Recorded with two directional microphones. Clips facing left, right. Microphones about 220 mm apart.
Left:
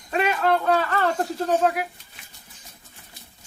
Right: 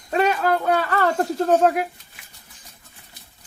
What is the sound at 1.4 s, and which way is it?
Speech, 45° right (ahead or behind).